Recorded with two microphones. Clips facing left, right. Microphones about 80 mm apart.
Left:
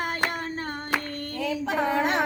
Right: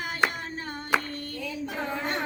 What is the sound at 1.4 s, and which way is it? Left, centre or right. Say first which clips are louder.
Singing: left 8 dB; left.